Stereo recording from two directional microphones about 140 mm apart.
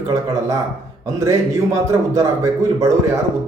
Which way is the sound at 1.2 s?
20° right (ahead or behind).